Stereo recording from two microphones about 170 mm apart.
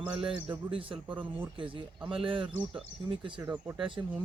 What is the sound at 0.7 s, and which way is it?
Speech, 30° right (ahead or behind).